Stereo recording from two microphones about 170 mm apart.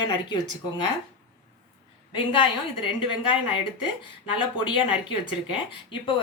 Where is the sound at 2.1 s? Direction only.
30° left (ahead or behind).